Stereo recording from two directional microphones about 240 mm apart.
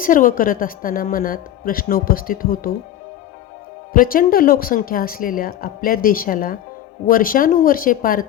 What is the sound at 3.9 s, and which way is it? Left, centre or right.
A woman's voice, left.